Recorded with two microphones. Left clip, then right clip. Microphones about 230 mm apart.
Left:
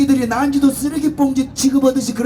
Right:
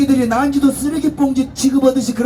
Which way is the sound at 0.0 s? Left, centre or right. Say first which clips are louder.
Right 1 dB; left.